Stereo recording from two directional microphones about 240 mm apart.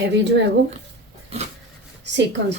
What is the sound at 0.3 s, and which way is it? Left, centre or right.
Speech, right.